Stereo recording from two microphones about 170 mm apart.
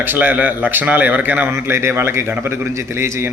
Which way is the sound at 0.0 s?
10° right (ahead or behind).